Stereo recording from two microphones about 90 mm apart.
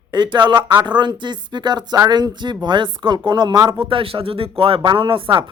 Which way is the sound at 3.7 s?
75° right (ahead or behind).